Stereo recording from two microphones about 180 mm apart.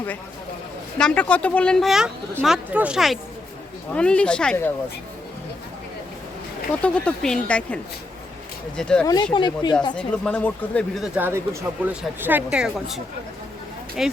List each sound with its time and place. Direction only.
0.9 s speech: 5° left (ahead or behind)
6.8 s speech: 5° left (ahead or behind)
9.3 s speech: 25° left (ahead or behind)
9.9 s speech: 5° left (ahead or behind)
14.0 s speech: 5° right (ahead or behind)